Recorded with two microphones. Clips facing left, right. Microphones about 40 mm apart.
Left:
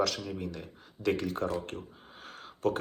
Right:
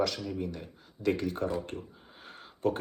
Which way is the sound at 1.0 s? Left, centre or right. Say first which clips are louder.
Even; left.